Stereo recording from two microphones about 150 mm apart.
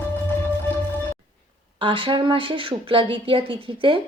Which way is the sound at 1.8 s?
35° right (ahead or behind).